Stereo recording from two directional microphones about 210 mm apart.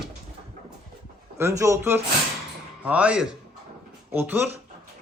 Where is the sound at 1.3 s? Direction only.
15° right (ahead or behind).